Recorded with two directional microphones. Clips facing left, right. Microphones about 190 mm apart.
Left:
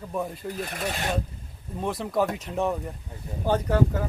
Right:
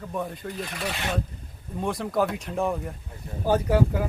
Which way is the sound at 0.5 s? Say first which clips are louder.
Left 2 dB; 45° left (ahead or behind).